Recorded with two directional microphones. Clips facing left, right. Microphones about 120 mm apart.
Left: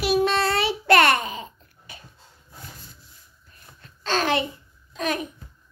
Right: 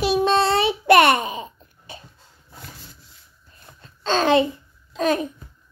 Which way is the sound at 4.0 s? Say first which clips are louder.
Right 6 dB; 25° right (ahead or behind).